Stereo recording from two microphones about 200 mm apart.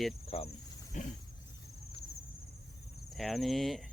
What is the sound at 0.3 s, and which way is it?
Cricket, 30° left (ahead or behind).